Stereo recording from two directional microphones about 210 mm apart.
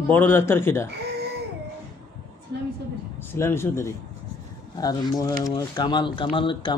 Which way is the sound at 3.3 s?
10° left (ahead or behind).